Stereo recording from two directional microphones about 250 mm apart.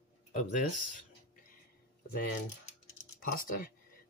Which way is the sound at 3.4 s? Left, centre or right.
Left.